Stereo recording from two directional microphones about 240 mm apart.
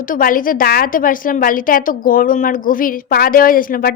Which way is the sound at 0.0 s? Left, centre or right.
Left.